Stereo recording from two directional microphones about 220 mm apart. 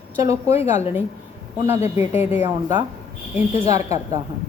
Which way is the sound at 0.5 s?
30° left (ahead or behind).